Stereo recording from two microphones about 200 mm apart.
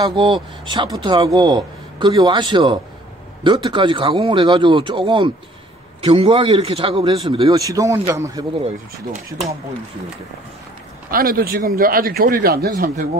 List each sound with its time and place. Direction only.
0.0 s a man's voice: 25° right (ahead or behind)
9.1 s speech: 35° right (ahead or behind)
11.1 s a man's voice: 45° right (ahead or behind)